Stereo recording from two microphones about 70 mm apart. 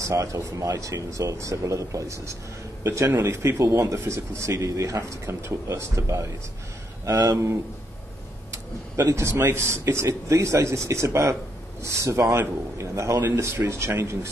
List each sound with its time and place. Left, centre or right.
0.0 s a man's voice: right
7.1 s speech: right
8.9 s a man's voice: right